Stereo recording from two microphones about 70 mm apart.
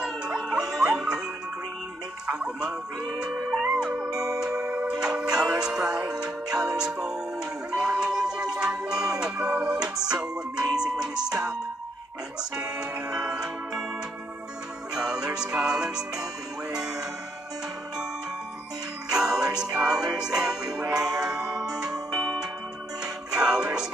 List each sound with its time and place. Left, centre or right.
0.0 s music: centre
2.2 s speech: centre
3.4 s music: centre
12.5 s music: centre
15.0 s music: centre
19.0 s music: centre
23.3 s music: centre